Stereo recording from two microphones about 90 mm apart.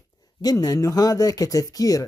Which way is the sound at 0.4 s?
45° left (ahead or behind).